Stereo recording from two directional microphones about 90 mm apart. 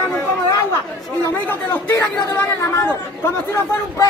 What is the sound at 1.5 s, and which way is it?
Speech, 20° left (ahead or behind).